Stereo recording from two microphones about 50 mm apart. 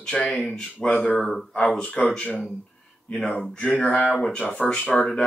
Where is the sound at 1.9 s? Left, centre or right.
Left.